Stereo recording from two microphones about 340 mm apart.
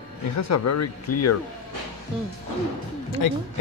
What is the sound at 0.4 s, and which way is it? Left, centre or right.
Speech, left.